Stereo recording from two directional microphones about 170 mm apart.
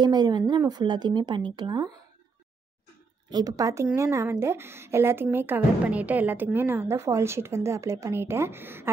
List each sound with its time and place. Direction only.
0.0 s a woman's voice: 25° right (ahead or behind)
3.3 s a woman's voice: 20° right (ahead or behind)